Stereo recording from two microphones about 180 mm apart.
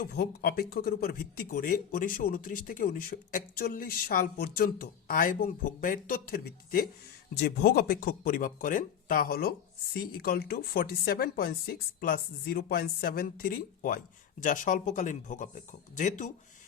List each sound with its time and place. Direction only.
0.0 s speech: 60° left (ahead or behind); by 16.3 s 45° left (ahead or behind)